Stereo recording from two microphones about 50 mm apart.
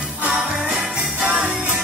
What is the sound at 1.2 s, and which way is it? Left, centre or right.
Music, centre.